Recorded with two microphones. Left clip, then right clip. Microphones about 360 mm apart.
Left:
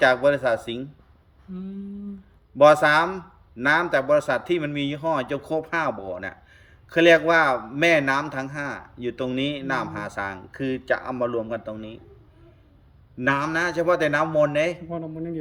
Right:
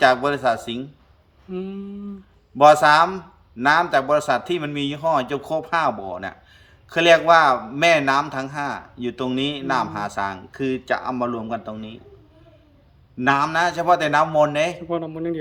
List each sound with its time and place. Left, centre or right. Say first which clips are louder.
0.0 s speech: right 1 dB; centre
2.6 s speech: right 3 dB; centre
13.1 s speech: right 4 dB; centre